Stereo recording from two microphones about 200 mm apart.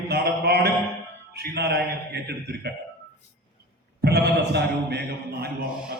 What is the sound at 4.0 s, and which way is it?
A man's voice, 55° right (ahead or behind).